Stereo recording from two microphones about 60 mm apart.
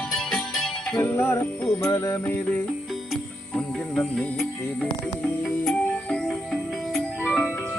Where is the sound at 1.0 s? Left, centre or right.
Left.